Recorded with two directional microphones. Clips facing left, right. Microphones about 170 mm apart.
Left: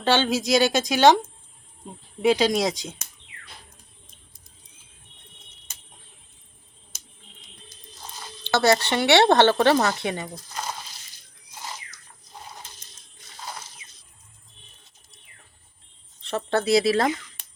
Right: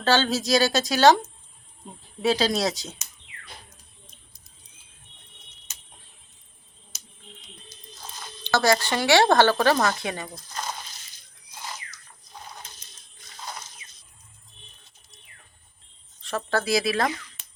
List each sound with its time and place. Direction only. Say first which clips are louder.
0.0 s a woman's voice: left 1 dB; 15° left (ahead or behind)
2.2 s a woman's voice: left 3 dB; 15° left (ahead or behind)
6.9 s a sound: even; 50° left (ahead or behind)
8.4 s speech: left 2 dB; 20° left (ahead or behind)
16.3 s speech: left 4 dB; 25° left (ahead or behind)